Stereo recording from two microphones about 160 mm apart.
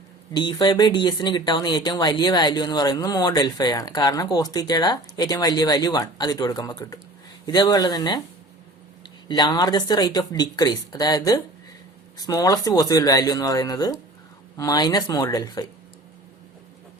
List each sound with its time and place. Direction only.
0.3 s speech: 25° left (ahead or behind)